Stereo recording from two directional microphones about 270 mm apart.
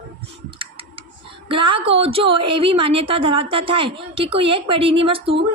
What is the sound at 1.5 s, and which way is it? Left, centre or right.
A woman's voice, centre.